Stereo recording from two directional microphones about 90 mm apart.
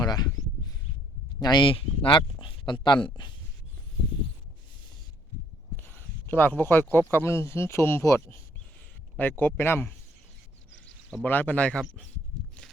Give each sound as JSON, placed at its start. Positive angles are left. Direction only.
{"t": 0.0, "sound": "a sound", "side_deg": 50}
{"t": 1.4, "sound": "speech", "side_deg": 55}
{"t": 5.7, "sound": "a sound", "side_deg": 20}
{"t": 7.1, "sound": "speech", "side_deg": 30}
{"t": 9.2, "sound": "speech", "side_deg": 20}
{"t": 11.2, "sound": "speech", "side_deg": 20}